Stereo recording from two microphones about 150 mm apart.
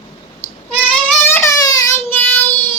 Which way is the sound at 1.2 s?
15° left (ahead or behind).